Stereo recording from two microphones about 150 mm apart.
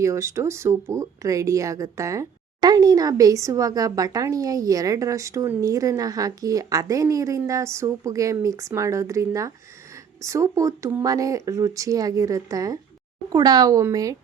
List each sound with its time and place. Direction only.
0.0 s speech: 20° right (ahead or behind)